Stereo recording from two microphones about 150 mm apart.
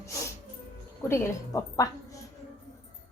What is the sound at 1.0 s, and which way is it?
A woman's voice, 15° left (ahead or behind).